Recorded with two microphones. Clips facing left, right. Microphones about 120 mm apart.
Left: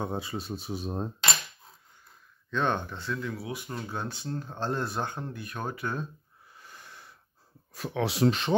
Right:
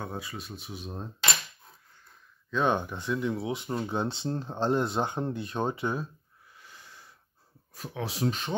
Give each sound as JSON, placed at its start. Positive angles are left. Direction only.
{"t": 0.0, "sound": "speech", "side_deg": 25}
{"t": 2.5, "sound": "speech", "side_deg": -10}
{"t": 6.6, "sound": "wheeze", "side_deg": 55}
{"t": 7.7, "sound": "speech", "side_deg": 75}